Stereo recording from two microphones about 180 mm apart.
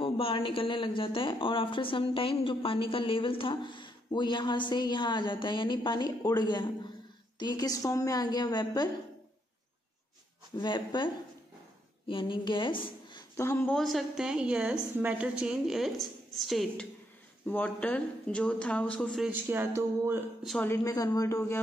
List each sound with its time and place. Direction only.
0.0 s a woman's voice: 30° left (ahead or behind)
10.6 s a woman's voice: 25° left (ahead or behind)
12.1 s speech: 25° left (ahead or behind)
13.4 s speech: 15° left (ahead or behind)
13.7 s a woman's voice: centre (ahead or behind)
19.3 s speech: 10° right (ahead or behind)
20.4 s speech: 10° left (ahead or behind)